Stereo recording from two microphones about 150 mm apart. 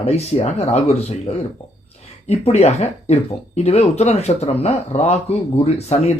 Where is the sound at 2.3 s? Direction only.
45° left (ahead or behind).